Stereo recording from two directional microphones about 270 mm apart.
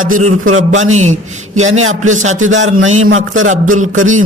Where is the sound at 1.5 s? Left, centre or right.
Right.